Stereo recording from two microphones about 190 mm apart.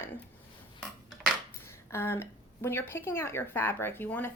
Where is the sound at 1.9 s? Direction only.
15° left (ahead or behind).